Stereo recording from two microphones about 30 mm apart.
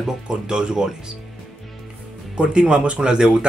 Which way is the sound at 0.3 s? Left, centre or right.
Right.